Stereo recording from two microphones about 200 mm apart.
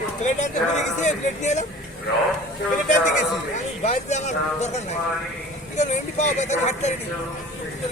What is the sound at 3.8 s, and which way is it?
Speech, 35° left (ahead or behind).